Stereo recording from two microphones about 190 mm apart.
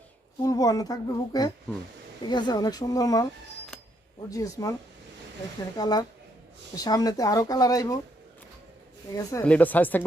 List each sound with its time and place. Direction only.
0.4 s speech: 20° left (ahead or behind)
3.7 s a sound: centre (ahead or behind)
4.3 s speech: 20° left (ahead or behind)
5.7 s speech: 20° left (ahead or behind)
9.1 s speech: 10° left (ahead or behind)